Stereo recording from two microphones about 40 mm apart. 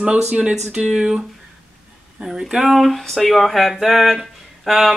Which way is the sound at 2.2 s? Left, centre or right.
Centre.